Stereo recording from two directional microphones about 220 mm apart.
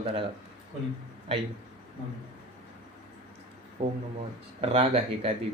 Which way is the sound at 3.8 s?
25° right (ahead or behind).